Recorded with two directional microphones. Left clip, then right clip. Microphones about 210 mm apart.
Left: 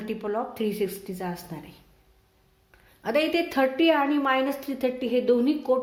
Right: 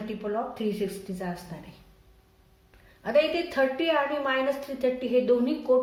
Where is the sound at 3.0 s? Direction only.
45° left (ahead or behind).